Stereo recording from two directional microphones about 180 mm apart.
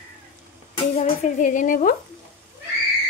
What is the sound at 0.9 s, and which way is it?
Speech, 35° left (ahead or behind).